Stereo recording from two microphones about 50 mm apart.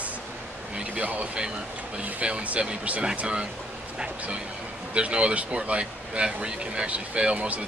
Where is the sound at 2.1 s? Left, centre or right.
Right.